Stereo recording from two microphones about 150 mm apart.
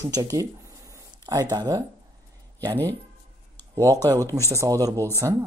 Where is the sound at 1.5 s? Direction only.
25° right (ahead or behind).